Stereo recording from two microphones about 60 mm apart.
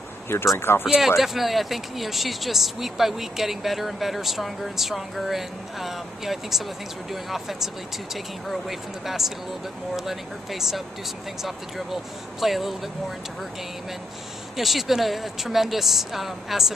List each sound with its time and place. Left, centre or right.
0.6 s speech: left
0.8 s speech: centre
14.6 s speech: centre